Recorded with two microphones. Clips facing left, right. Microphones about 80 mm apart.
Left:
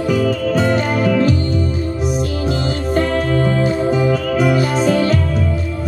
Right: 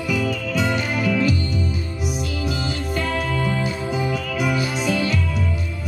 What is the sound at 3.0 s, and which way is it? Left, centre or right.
Music, left.